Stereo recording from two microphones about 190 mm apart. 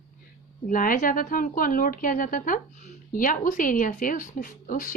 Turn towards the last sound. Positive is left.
turn(degrees=45)  # may be behind; listen again after turning